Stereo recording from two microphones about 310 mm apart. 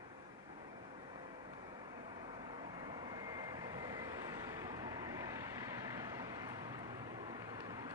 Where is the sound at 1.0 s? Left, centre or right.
Centre.